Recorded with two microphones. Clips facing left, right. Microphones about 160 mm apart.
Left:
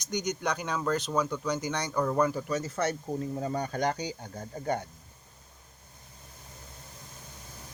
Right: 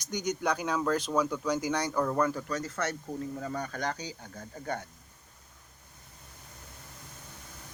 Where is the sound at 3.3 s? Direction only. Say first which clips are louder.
Left 4 dB; 25° left (ahead or behind).